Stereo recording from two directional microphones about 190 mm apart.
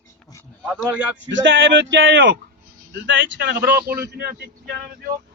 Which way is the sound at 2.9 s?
60° right (ahead or behind).